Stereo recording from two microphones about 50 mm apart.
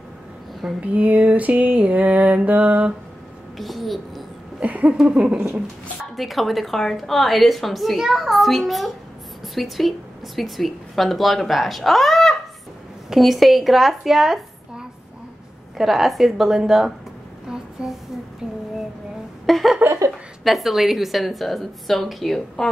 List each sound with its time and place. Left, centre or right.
0.7 s mantra: right
3.5 s a child's voice: centre
4.6 s mantra: right
6.1 s a woman's voice: centre
17.5 s a sound: centre
19.4 s a sound: centre
20.4 s a woman's voice: centre